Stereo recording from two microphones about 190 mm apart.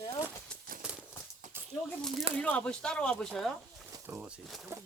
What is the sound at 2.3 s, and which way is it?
A man's voice, 5° left (ahead or behind).